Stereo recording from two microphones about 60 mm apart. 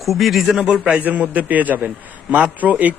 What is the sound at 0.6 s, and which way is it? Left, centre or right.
Speech, centre.